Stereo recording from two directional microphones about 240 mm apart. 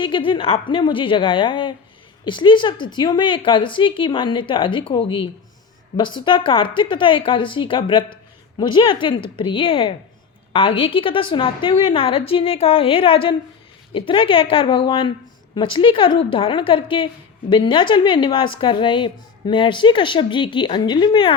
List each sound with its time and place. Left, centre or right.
0.0 s a woman's voice: left